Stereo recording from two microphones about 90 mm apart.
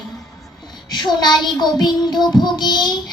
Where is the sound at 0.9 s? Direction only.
55° left (ahead or behind).